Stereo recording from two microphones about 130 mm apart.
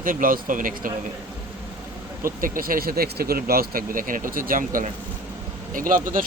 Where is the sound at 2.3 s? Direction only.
90° right.